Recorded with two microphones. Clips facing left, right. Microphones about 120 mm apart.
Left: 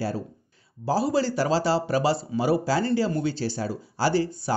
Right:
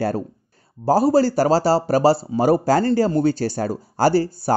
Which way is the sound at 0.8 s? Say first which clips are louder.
Right 8 dB; 45° right (ahead or behind).